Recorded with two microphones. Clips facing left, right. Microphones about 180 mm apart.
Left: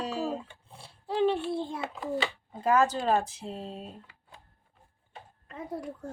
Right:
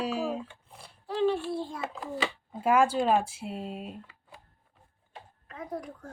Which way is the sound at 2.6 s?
10° right (ahead or behind).